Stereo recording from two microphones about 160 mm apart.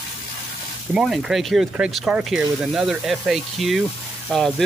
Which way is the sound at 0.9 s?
5° right (ahead or behind).